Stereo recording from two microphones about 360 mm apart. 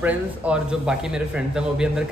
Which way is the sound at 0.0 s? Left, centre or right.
Centre.